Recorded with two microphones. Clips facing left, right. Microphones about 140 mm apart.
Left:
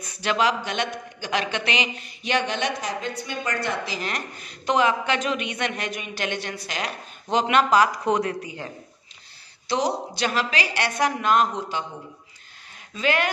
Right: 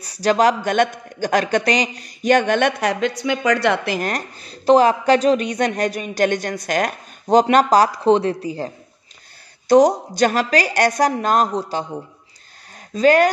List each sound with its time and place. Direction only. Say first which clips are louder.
0.0 s a man's voice: right 7 dB; 35° right (ahead or behind); by 4.1 s 60° right (ahead or behind)
4.1 s speech: right 6 dB; 35° right (ahead or behind)
9.7 s a man's voice: right 12 dB; 45° right (ahead or behind)
12.9 s speech: right 10 dB; 40° right (ahead or behind)